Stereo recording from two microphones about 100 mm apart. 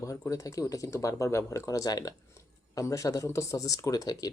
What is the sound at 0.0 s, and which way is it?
Speech, 35° left (ahead or behind).